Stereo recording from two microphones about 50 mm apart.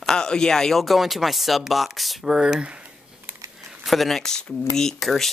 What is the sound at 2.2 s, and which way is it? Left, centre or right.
Speech, centre.